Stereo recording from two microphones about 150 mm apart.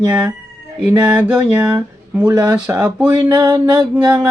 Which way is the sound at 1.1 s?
10° right (ahead or behind).